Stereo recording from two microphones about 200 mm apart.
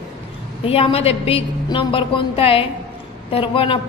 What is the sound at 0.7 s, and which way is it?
A woman's voice, 30° left (ahead or behind).